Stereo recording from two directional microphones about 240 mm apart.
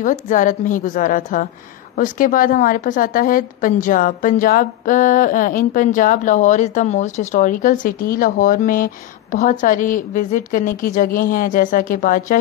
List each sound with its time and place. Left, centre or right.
0.0 s a woman's voice: left